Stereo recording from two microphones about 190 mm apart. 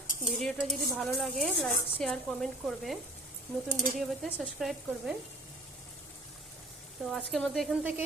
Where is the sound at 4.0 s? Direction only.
Centre (ahead or behind).